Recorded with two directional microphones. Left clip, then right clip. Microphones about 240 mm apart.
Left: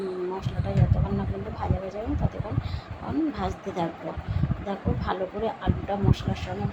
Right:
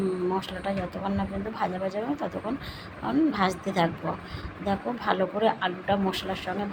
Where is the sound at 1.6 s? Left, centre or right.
Centre.